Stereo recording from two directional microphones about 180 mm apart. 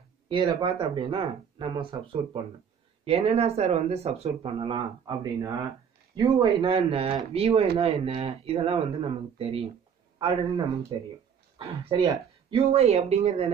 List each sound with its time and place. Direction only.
0.3 s speech: 25° right (ahead or behind)
10.9 s speech: 30° right (ahead or behind)